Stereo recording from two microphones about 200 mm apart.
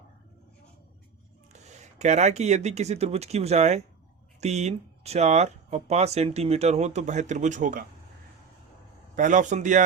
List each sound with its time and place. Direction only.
1.6 s speech: 35° right (ahead or behind)
9.1 s speech: 40° right (ahead or behind)